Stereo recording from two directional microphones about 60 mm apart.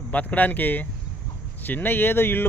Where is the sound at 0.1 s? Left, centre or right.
Left.